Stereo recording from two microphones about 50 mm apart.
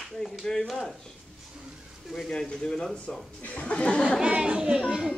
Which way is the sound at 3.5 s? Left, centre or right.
Left.